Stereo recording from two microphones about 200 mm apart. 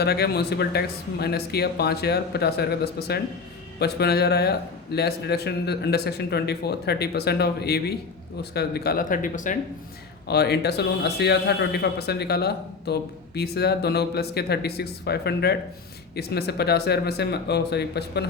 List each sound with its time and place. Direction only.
0.0 s a man's voice: 55° left (ahead or behind)
10.2 s a man's voice: 55° left (ahead or behind)